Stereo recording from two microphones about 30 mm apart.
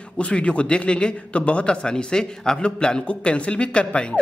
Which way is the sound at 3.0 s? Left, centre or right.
Left.